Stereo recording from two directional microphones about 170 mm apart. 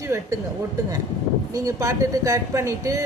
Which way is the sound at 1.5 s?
20° right (ahead or behind).